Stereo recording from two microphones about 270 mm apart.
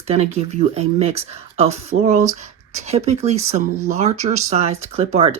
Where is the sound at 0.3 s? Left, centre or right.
Right.